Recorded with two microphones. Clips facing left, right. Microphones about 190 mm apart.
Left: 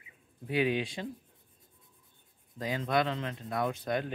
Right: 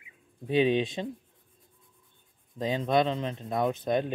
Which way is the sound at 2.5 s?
20° right (ahead or behind).